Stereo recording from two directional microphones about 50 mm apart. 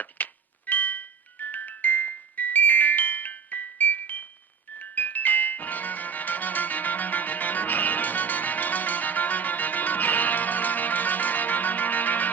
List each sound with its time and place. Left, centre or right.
0.0 s music: left